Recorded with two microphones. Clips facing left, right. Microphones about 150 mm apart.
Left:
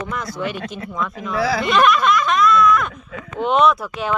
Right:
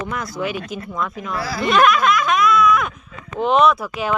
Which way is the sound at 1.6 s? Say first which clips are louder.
Right 2 dB; centre (ahead or behind).